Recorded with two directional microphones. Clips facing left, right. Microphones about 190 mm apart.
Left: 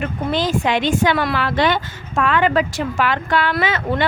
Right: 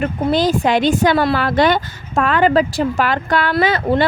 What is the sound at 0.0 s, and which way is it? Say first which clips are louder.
Speech: right 5 dB; 40° right (ahead or behind).